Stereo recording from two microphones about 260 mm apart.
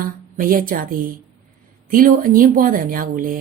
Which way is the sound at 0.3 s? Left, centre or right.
Right.